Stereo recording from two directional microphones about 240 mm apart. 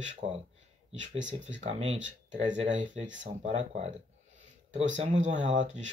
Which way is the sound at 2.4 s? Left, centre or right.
Right.